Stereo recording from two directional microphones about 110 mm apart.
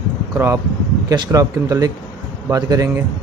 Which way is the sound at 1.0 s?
35° right (ahead or behind).